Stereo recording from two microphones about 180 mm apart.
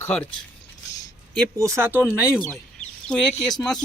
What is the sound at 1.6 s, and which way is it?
Speech, 15° right (ahead or behind).